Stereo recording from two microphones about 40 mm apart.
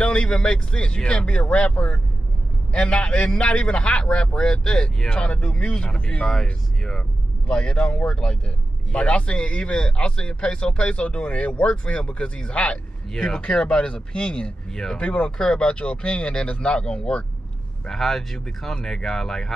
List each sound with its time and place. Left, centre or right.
0.0 s speech: left
6.4 s speech: centre
17.8 s speech: centre